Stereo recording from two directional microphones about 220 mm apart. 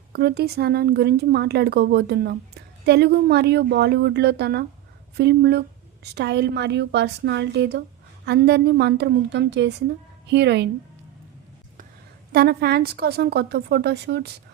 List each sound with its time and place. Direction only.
0.1 s a woman's voice: 45° right (ahead or behind)
12.3 s a woman's voice: 45° right (ahead or behind)